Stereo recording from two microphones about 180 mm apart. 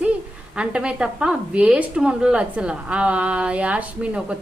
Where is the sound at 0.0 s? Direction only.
5° right (ahead or behind).